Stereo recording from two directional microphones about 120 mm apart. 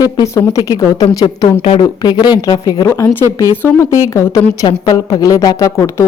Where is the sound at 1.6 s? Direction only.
50° left (ahead or behind).